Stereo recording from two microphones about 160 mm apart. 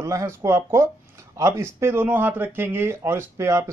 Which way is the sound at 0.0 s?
20° right (ahead or behind).